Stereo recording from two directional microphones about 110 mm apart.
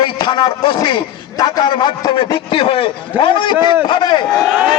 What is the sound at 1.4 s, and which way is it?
A man's voice, 40° left (ahead or behind).